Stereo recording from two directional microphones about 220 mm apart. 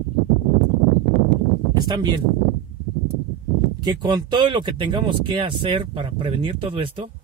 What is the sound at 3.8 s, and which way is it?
Speech, 20° right (ahead or behind).